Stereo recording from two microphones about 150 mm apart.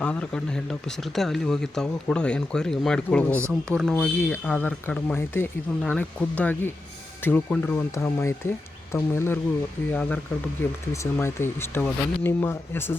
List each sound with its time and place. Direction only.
0.0 s speech: 10° left (ahead or behind)
4.2 s speech: 15° left (ahead or behind)